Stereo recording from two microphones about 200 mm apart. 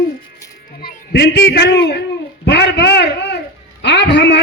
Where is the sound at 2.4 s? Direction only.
55° left (ahead or behind).